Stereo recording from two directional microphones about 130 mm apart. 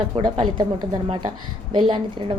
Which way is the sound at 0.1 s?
45° right (ahead or behind).